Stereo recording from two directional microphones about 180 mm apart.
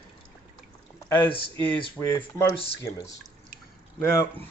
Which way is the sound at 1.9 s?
10° left (ahead or behind).